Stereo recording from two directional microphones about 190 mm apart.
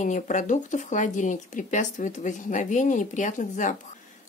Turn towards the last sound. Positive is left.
turn(degrees=40)  # may be behind; listen again after turning